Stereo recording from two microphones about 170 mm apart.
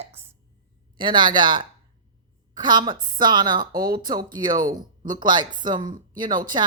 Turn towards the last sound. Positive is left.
turn(degrees=-25)  # may be behind; listen again after turning